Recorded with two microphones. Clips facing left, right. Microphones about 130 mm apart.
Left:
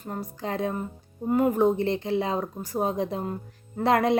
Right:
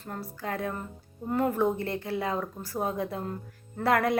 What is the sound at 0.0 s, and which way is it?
A woman's voice, 20° left (ahead or behind).